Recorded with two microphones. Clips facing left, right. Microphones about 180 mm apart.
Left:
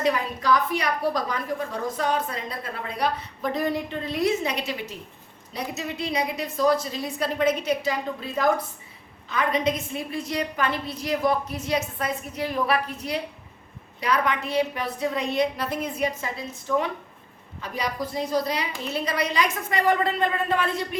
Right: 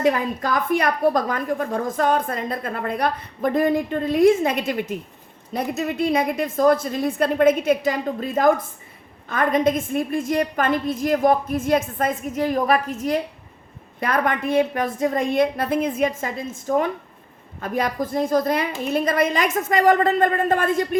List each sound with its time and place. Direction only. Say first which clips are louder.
0.0 s a woman's voice: right 4 dB; 50° right (ahead or behind)